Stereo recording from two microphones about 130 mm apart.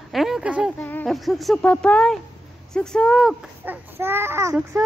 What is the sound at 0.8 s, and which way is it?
Speech, 15° left (ahead or behind).